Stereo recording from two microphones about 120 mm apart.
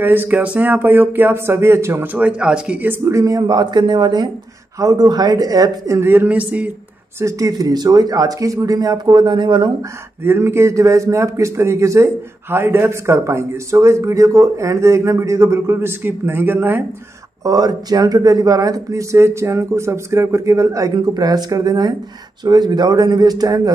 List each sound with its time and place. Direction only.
0.0 s speech: 15° right (ahead or behind)
3.1 s a man's voice: 25° right (ahead or behind); by 6.7 s 10° right (ahead or behind)
7.2 s speech: 25° right (ahead or behind)
10.2 s a man's voice: 20° right (ahead or behind)
17.4 s a man's voice: 30° right (ahead or behind)